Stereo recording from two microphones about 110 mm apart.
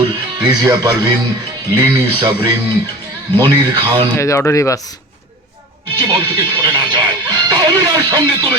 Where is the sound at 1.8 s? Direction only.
50° right (ahead or behind).